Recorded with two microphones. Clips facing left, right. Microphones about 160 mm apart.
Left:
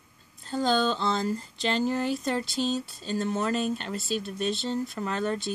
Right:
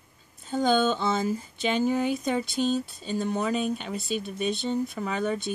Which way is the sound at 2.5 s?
50° right (ahead or behind).